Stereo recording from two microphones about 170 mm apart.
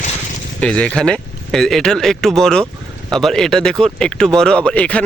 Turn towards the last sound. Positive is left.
turn(degrees=5)  # may be behind; listen again after turning